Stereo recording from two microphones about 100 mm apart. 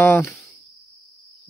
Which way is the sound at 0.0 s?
20° left (ahead or behind).